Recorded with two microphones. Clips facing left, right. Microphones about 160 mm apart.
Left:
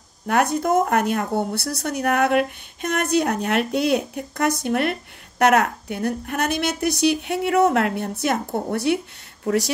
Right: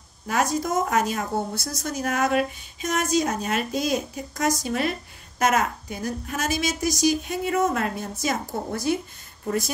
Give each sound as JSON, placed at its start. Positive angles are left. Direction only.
{"t": 0.3, "sound": "speech", "side_deg": 60}